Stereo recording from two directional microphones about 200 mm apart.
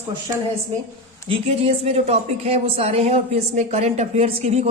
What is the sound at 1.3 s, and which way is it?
Speech, 30° right (ahead or behind).